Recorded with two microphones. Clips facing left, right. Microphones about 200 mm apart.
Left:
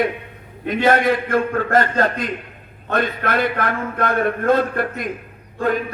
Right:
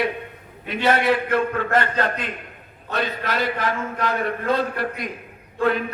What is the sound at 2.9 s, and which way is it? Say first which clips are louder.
A man's voice: left 5 dB; 55° left (ahead or behind).